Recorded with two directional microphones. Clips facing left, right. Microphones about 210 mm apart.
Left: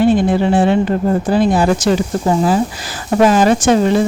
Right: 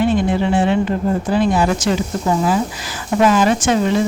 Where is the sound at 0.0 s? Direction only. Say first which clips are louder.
Left 4 dB; 40° left (ahead or behind).